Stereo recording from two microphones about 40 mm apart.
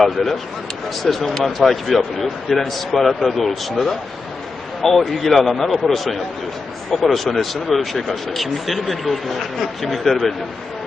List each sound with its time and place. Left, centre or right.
0.0 s speech: centre